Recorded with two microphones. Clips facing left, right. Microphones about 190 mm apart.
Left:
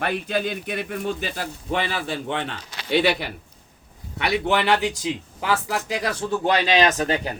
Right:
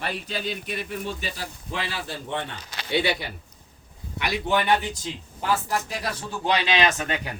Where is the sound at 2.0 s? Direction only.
70° left (ahead or behind); by 7.3 s 35° left (ahead or behind).